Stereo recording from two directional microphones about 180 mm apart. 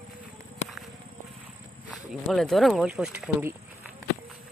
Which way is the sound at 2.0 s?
Centre (ahead or behind).